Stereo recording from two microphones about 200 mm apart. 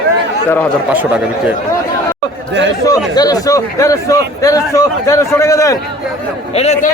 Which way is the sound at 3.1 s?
20° left (ahead or behind).